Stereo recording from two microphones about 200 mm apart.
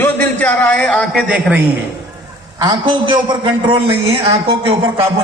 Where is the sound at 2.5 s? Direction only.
20° right (ahead or behind).